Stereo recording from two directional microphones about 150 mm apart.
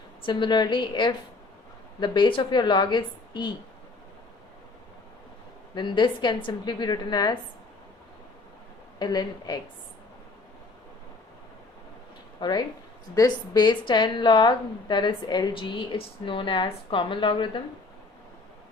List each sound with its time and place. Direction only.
0.3 s a woman's voice: 30° left (ahead or behind)
5.7 s a woman's voice: 30° left (ahead or behind)
9.0 s a woman's voice: 25° left (ahead or behind)
12.4 s a woman's voice: 30° left (ahead or behind)